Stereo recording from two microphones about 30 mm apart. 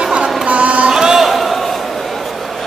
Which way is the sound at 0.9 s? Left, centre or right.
Centre.